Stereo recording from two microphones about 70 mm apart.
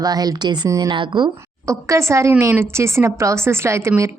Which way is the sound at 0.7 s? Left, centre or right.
Right.